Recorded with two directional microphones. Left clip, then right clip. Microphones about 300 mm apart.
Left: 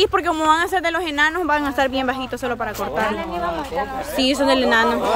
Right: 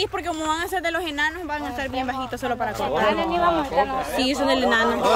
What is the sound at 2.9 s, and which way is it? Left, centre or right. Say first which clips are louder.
Speech: right 4 dB; right.